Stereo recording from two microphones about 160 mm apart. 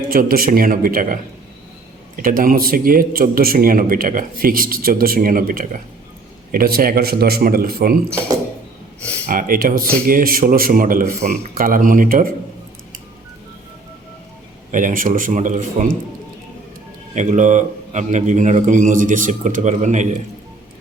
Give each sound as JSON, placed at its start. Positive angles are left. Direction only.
{"t": 0.1, "sound": "a man's voice", "side_deg": -65}
{"t": 9.2, "sound": "a man's voice", "side_deg": -55}
{"t": 14.7, "sound": "a man's voice", "side_deg": -55}
{"t": 17.2, "sound": "a man's voice", "side_deg": -50}